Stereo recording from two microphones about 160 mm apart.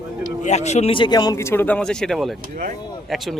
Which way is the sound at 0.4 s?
45° left (ahead or behind).